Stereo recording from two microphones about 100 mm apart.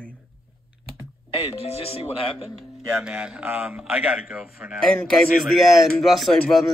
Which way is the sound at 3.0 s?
10° right (ahead or behind).